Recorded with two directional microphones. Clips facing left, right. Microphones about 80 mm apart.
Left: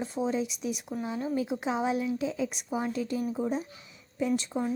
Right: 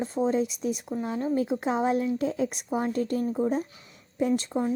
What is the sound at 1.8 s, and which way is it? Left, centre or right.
Speech, right.